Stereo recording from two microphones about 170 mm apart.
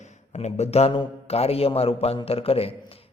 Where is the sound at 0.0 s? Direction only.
40° left (ahead or behind).